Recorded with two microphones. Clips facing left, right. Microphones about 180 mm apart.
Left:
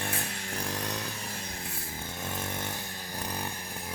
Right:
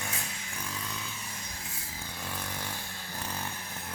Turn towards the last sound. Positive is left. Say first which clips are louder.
# left 2 dB
turn(degrees=15)  # may be behind; listen again after turning